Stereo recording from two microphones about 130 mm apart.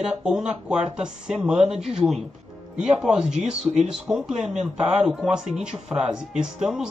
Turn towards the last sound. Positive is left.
turn(degrees=-5)  # may be behind; listen again after turning